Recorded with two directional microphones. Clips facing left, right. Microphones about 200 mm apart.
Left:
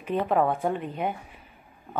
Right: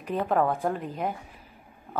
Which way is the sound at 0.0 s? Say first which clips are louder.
Left 1 dB; centre (ahead or behind).